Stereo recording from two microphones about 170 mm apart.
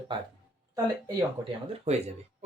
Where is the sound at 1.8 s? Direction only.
40° right (ahead or behind).